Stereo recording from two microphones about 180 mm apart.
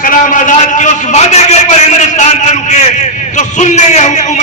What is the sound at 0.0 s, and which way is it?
A man's voice, 50° left (ahead or behind).